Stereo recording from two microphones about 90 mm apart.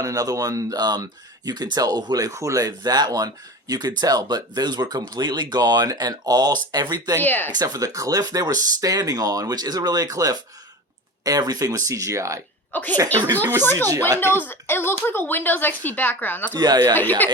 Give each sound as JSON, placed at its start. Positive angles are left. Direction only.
{"t": 0.0, "sound": "speech", "side_deg": -45}
{"t": 7.2, "sound": "speech", "side_deg": 20}
{"t": 7.5, "sound": "speech", "side_deg": -45}
{"t": 12.7, "sound": "speech", "side_deg": 20}
{"t": 16.6, "sound": "speech", "side_deg": -50}
{"t": 16.9, "sound": "speech", "side_deg": 20}